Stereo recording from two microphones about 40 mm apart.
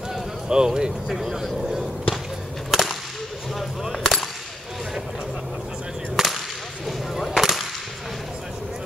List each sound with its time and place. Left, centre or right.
0.5 s speech: centre
2.7 s whip: centre
3.9 s speech: centre
6.1 s whip: centre